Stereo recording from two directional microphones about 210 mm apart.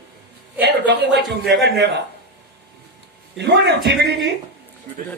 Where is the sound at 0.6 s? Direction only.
55° right (ahead or behind).